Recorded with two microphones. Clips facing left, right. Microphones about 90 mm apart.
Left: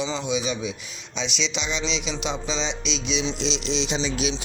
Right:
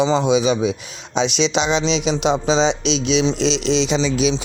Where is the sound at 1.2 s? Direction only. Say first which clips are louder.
Right 11 dB; 70° right (ahead or behind); by 3.8 s 90° right.